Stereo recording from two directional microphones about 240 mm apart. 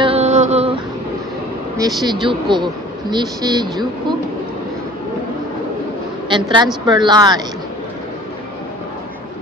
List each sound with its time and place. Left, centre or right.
0.0 s a sound: right
1.8 s a man's voice: centre
6.2 s a woman's voice: centre